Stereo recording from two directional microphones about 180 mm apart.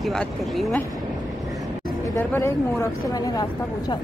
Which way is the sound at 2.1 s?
15° left (ahead or behind).